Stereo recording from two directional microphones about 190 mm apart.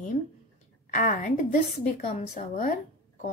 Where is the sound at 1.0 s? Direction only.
40° left (ahead or behind).